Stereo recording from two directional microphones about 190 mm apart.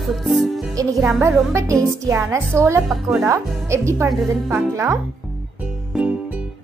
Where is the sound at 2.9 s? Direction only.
Centre (ahead or behind).